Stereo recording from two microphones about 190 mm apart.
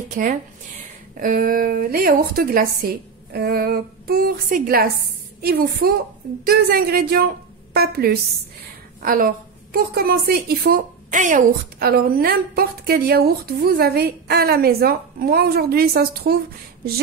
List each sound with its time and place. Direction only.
0.1 s a woman's voice: 45° right (ahead or behind)